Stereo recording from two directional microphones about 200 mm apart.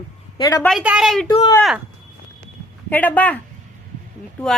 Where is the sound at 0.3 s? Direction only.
20° left (ahead or behind).